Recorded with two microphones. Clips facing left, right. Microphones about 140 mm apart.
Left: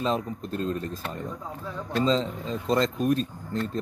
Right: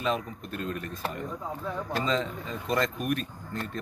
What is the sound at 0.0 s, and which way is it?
Speech, 30° left (ahead or behind).